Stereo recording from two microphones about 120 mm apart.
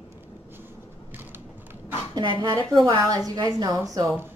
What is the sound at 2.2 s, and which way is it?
Speech, 40° right (ahead or behind).